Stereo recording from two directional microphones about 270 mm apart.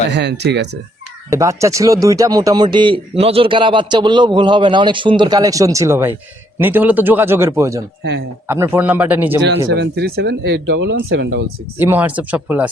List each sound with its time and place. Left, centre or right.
0.1 s speech: right
1.3 s a man's voice: centre
9.7 s speech: right
11.8 s speech: centre